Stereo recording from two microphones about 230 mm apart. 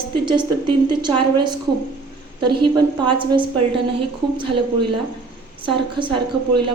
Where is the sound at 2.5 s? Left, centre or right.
Centre.